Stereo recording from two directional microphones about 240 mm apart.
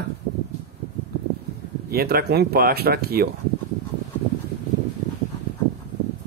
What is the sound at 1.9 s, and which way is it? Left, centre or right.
Speech, right.